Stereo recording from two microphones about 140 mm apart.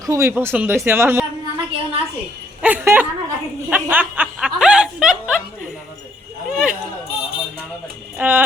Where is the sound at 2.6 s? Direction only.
10° right (ahead or behind).